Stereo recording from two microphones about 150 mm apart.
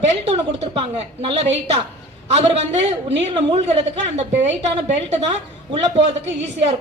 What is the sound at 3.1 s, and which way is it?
Speech, 45° right (ahead or behind).